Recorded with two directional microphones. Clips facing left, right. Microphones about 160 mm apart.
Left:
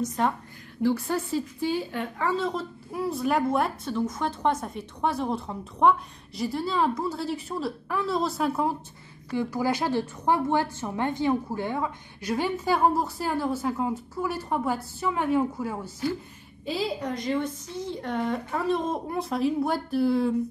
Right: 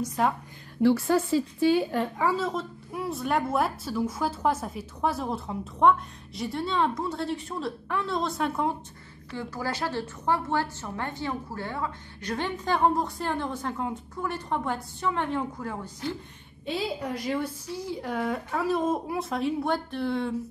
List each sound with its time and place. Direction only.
0.0 s a woman's voice: 5° right (ahead or behind)
0.8 s a woman's voice: 90° right; by 1.9 s 70° right (ahead or behind)
2.1 s a woman's voice: 5° right (ahead or behind)
9.3 s a woman's voice: 15° left (ahead or behind)